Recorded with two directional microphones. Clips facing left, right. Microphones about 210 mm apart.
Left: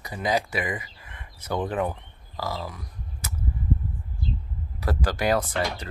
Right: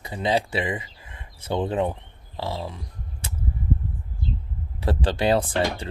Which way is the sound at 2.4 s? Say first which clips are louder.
Right 2 dB; 25° right (ahead or behind).